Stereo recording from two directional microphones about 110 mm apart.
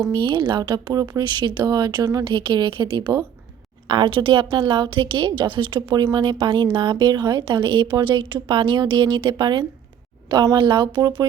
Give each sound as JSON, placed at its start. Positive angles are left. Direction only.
{"t": 0.1, "sound": "speech", "side_deg": -45}